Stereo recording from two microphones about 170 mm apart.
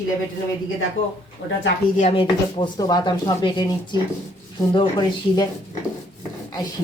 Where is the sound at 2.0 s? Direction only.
35° left (ahead or behind).